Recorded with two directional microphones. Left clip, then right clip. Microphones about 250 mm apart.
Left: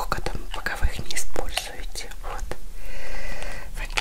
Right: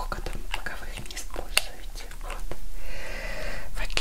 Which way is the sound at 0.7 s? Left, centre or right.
Left.